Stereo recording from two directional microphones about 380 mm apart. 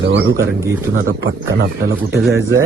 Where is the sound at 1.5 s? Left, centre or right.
Right.